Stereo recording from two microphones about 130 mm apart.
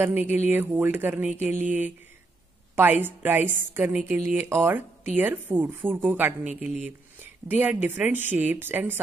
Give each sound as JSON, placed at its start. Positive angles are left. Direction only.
{"t": 0.0, "sound": "speech", "side_deg": -15}